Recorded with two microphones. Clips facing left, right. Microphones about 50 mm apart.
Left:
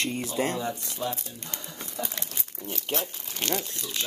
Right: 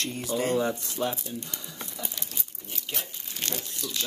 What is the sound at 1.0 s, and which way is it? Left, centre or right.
Speech, right.